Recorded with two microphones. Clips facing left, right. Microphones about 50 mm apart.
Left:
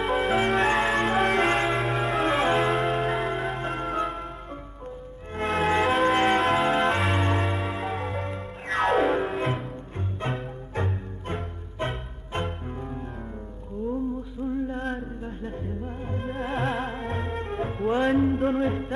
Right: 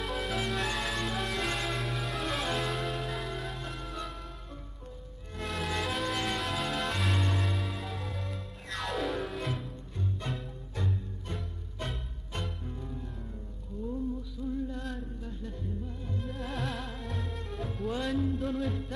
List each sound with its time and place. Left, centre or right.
0.0 s music: left
1.9 s music: left
2.2 s music: left
2.7 s church bell: left
5.3 s music: left
7.5 s music: left
14.7 s music: left